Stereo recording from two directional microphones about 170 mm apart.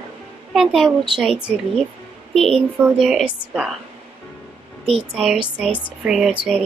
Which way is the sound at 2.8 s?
5° right (ahead or behind).